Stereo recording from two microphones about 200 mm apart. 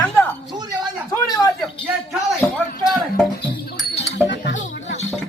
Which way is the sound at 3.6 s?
60° left (ahead or behind).